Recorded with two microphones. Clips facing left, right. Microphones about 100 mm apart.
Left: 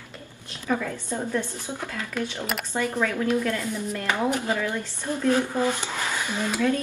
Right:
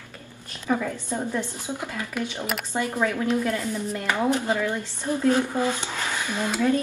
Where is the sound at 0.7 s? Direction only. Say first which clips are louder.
Right 1 dB; 15° right (ahead or behind).